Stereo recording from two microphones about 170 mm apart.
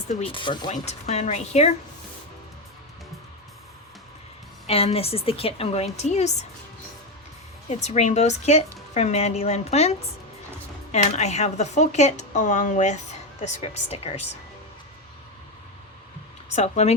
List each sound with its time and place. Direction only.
0.1 s speech: 35° left (ahead or behind)
0.7 s a woman's voice: 40° left (ahead or behind)
4.6 s a woman's voice: 35° left (ahead or behind)
7.7 s a woman's voice: 40° left (ahead or behind)
10.9 s a woman's voice: 40° left (ahead or behind)
16.5 s speech: 40° left (ahead or behind)